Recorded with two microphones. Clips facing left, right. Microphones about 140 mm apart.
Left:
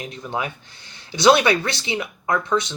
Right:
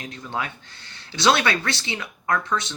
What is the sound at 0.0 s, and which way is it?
Speech, 15° left (ahead or behind).